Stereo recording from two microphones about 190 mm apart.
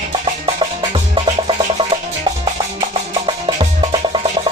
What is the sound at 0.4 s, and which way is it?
Music, 30° right (ahead or behind).